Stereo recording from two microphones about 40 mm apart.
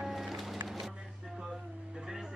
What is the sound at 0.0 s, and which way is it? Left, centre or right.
Music, centre.